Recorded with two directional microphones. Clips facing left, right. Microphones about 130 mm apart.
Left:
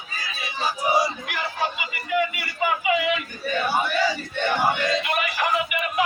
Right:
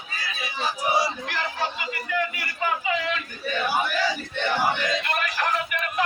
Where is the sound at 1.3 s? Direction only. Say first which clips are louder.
Left 1 dB; 10° left (ahead or behind).